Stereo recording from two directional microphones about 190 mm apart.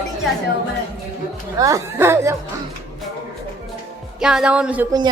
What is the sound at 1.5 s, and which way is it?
Speech, 15° right (ahead or behind).